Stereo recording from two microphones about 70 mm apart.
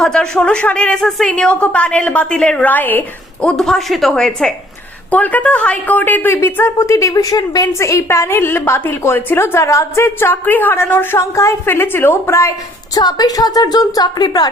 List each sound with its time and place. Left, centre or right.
0.0 s a woman's voice: centre; by 3.0 s left
3.4 s a woman's voice: centre
5.1 s a woman's voice: left
6.9 s a woman's voice: left
7.7 s a woman's voice: left
11.2 s a woman's voice: left
12.9 s a woman's voice: left